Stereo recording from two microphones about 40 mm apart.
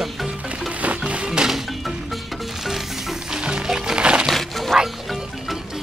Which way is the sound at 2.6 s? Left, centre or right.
Centre.